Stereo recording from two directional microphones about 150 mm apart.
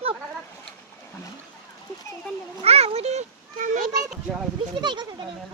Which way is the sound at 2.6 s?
45° right (ahead or behind).